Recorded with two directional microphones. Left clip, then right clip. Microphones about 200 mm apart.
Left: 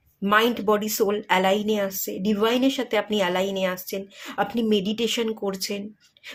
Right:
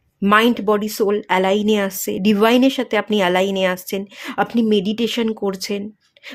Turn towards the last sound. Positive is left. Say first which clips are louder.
# right 5 dB
turn(degrees=-25)  # may be behind; listen again after turning